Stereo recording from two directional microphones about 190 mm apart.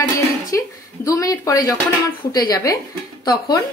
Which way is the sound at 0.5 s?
20° left (ahead or behind).